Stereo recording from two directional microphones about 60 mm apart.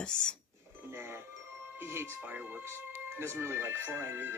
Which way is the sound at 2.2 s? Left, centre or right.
Right.